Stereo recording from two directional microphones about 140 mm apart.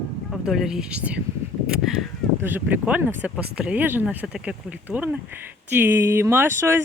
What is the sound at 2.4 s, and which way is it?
Speech, 15° right (ahead or behind).